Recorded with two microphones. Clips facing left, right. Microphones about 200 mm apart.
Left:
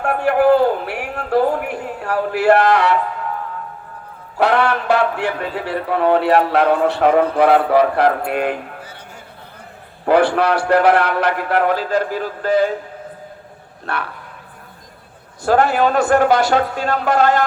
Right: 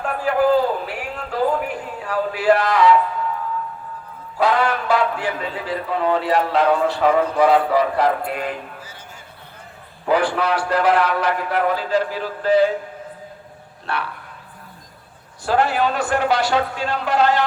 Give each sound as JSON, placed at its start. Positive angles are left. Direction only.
{"t": 0.0, "sound": "a sound", "side_deg": 65}
{"t": 4.4, "sound": "a man's voice", "side_deg": 65}
{"t": 10.1, "sound": "a man's voice", "side_deg": 65}
{"t": 11.8, "sound": "a man's voice", "side_deg": 50}
{"t": 13.8, "sound": "a man's voice", "side_deg": 50}
{"t": 15.4, "sound": "a man's voice", "side_deg": 50}